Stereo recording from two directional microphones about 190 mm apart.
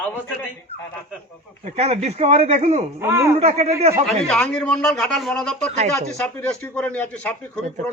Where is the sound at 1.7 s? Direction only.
35° right (ahead or behind).